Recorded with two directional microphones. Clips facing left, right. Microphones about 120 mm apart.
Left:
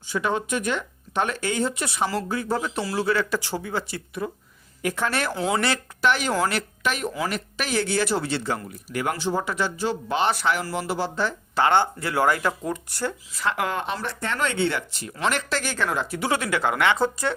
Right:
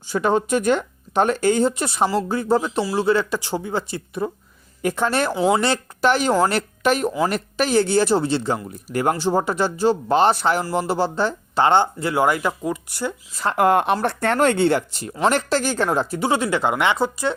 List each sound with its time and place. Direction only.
0.1 s speech: 35° right (ahead or behind)
5.3 s speech: 10° right (ahead or behind)
5.5 s speech: 25° right (ahead or behind)
8.9 s speech: 40° right (ahead or behind); by 13.1 s 10° right (ahead or behind)
13.3 s speech: 40° right (ahead or behind)
13.7 s speech: 55° right (ahead or behind); by 17.3 s 15° right (ahead or behind)